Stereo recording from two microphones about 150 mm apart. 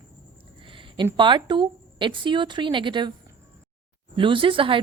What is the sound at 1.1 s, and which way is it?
Speech, 30° right (ahead or behind).